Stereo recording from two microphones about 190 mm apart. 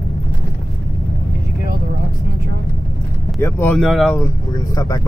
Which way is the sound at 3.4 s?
10° left (ahead or behind).